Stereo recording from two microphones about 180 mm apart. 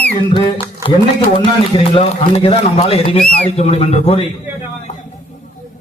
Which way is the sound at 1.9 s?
35° left (ahead or behind).